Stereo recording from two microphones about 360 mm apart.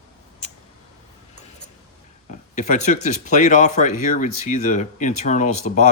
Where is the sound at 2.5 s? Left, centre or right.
Centre.